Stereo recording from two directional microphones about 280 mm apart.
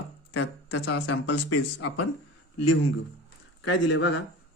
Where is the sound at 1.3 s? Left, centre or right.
Left.